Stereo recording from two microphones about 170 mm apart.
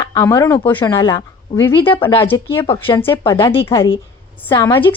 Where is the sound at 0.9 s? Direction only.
20° left (ahead or behind).